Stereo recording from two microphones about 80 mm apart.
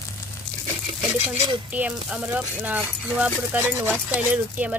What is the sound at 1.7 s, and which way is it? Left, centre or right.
A woman's voice, centre.